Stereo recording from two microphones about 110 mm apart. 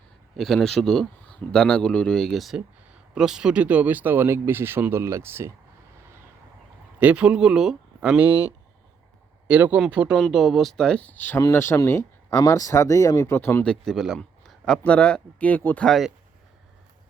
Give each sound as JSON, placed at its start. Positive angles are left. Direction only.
{"t": 0.3, "sound": "a man's voice", "side_deg": 0}
{"t": 7.0, "sound": "speech", "side_deg": -10}
{"t": 9.5, "sound": "speech", "side_deg": -15}
{"t": 10.2, "sound": "a man's voice", "side_deg": 0}
{"t": 11.3, "sound": "speech", "side_deg": 25}
{"t": 13.7, "sound": "speech", "side_deg": 0}
{"t": 15.9, "sound": "a man's voice", "side_deg": 0}